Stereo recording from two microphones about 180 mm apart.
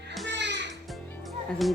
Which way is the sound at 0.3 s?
80° right.